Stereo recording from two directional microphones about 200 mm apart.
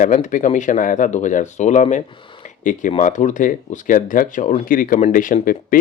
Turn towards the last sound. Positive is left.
turn(degrees=40)  # may be behind; listen again after turning